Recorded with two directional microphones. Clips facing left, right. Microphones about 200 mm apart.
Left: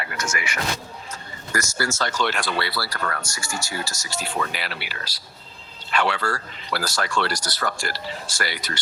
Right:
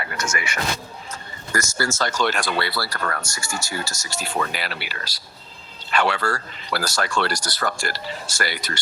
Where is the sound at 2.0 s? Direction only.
45° right (ahead or behind).